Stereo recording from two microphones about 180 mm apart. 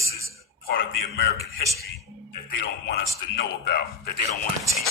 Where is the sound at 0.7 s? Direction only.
55° left (ahead or behind).